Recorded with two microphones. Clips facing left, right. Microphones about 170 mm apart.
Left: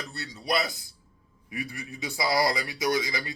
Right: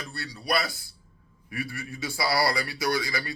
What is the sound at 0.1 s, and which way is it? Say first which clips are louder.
Speech: right 1 dB; 20° left (ahead or behind).